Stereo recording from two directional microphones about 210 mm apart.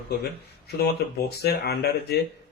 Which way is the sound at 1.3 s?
50° left (ahead or behind).